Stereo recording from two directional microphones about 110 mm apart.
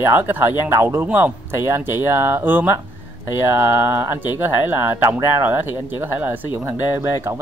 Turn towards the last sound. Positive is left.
turn(degrees=-25)  # may be behind; listen again after turning